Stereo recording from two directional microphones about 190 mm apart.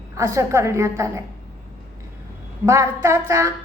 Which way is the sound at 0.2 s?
15° right (ahead or behind).